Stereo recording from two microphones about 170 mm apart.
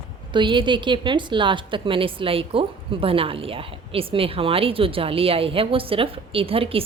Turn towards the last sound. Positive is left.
turn(degrees=-35)  # may be behind; listen again after turning